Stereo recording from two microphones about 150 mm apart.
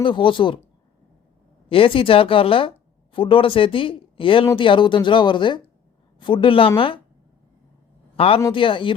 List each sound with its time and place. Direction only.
0.0 s speech: 35° left (ahead or behind)
1.7 s speech: 35° left (ahead or behind)
8.1 s a man's voice: 40° left (ahead or behind)